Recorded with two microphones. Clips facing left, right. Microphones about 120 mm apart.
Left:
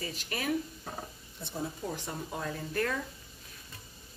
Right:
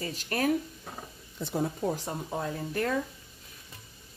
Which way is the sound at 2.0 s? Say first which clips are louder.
Right 4 dB; 25° right (ahead or behind).